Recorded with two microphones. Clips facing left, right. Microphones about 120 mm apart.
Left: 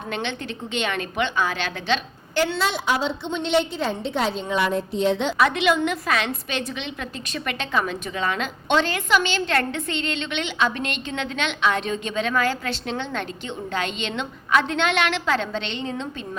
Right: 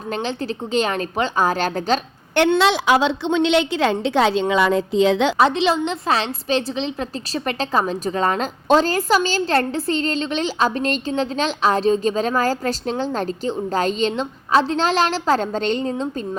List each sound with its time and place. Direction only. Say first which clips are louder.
0.1 s a woman's voice: right 5 dB; 35° right (ahead or behind)
2.3 s a woman's voice: right 7 dB; 65° right (ahead or behind); by 5.3 s 90° right
5.4 s a woman's voice: right 3 dB; 30° right (ahead or behind)